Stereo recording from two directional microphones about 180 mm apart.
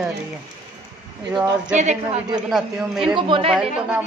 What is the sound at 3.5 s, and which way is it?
Speech, 5° right (ahead or behind).